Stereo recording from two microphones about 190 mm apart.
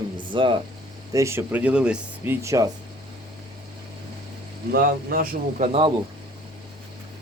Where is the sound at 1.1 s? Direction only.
15° right (ahead or behind).